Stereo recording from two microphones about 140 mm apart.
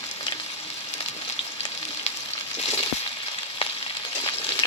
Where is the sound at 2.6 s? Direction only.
45° left (ahead or behind).